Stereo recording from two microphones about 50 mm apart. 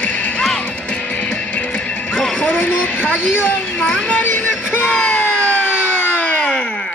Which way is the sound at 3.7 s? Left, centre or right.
Centre.